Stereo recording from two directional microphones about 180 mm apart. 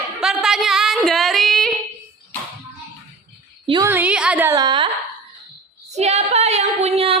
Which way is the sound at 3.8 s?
10° right (ahead or behind).